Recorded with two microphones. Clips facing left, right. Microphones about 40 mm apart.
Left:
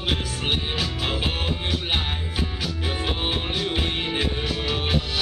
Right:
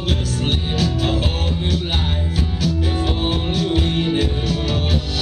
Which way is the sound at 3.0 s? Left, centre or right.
Centre.